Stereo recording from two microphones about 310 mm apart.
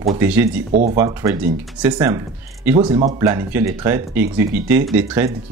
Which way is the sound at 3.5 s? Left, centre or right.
Centre.